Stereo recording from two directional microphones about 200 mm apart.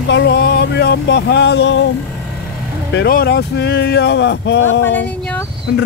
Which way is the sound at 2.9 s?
50° left (ahead or behind).